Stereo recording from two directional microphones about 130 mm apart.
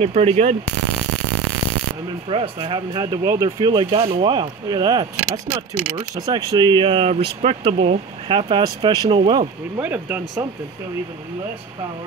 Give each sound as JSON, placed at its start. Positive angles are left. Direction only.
{"t": 0.0, "sound": "speech", "side_deg": -50}
{"t": 2.2, "sound": "speech", "side_deg": -45}
{"t": 2.9, "sound": "speech", "side_deg": -30}
{"t": 3.4, "sound": "speech", "side_deg": -40}
{"t": 8.6, "sound": "speech", "side_deg": -30}
{"t": 9.8, "sound": "speech", "side_deg": -10}